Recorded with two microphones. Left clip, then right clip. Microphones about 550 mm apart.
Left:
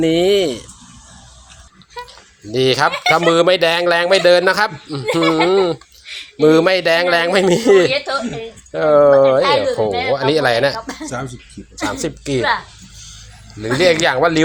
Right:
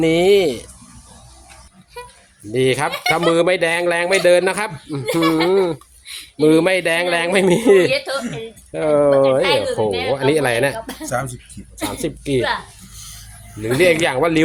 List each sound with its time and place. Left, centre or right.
0.0 s speech: right
2.0 s a sound: right
2.5 s speech: right
13.6 s speech: right